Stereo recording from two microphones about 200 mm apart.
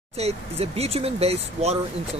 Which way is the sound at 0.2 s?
30° right (ahead or behind).